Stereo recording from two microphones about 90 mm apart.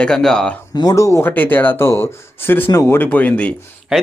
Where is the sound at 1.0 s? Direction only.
35° left (ahead or behind).